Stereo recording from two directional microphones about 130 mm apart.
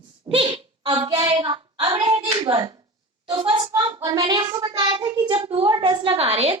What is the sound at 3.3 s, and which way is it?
A woman's voice, 45° right (ahead or behind).